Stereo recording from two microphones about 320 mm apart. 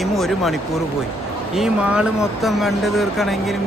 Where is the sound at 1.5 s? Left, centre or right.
Centre.